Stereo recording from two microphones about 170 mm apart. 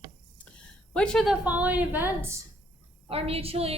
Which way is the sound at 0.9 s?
5° left (ahead or behind).